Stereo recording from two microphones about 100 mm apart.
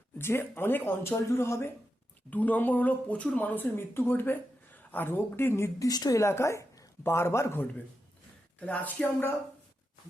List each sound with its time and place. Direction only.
0.2 s speech: 25° left (ahead or behind)
5.9 s speech: 40° left (ahead or behind)
8.5 s speech: 15° left (ahead or behind)